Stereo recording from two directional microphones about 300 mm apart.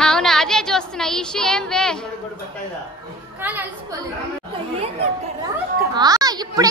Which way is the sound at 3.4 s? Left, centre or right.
Centre.